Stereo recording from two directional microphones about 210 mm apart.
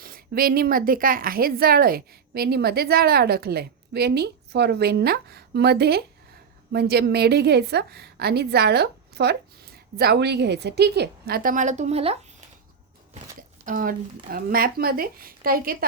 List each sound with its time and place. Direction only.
0.0 s speech: 45° right (ahead or behind)
13.7 s speech: 40° right (ahead or behind)